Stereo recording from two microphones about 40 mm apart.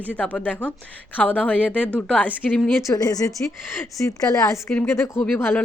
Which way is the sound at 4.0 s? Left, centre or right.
Left.